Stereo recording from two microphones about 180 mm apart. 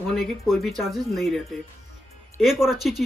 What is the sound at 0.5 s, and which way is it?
Speech, centre (ahead or behind).